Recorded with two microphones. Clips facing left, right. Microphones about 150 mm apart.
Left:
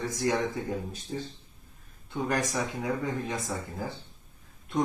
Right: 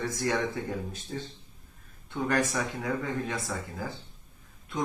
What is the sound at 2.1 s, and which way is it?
Speech, 15° left (ahead or behind).